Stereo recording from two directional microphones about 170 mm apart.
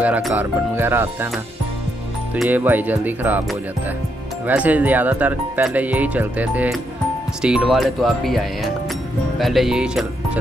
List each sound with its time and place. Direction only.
0.0 s speech: 10° right (ahead or behind)
2.3 s speech: 5° right (ahead or behind)
4.5 s speech: 10° right (ahead or behind)